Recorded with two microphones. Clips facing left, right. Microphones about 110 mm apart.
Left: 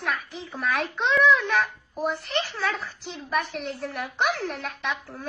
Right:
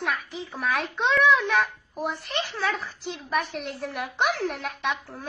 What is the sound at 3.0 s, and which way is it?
A child's voice, centre (ahead or behind).